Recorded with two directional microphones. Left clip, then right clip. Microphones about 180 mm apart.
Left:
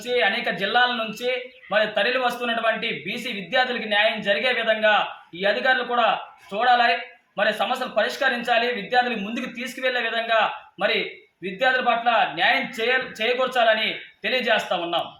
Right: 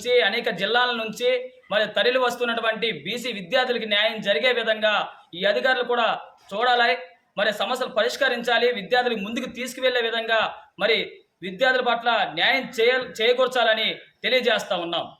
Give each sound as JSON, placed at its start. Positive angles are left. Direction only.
{"t": 0.0, "sound": "a man's voice", "side_deg": -35}